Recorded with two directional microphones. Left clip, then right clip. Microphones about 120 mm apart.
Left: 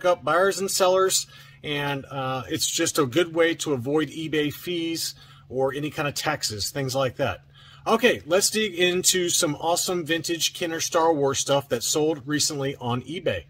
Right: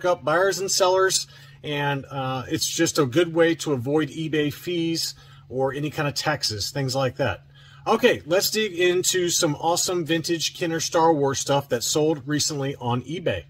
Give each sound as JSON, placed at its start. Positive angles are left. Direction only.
{"t": 0.0, "sound": "speech", "side_deg": 25}